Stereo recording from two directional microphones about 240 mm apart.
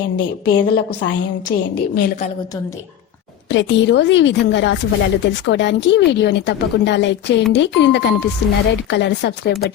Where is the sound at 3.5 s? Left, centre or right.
Left.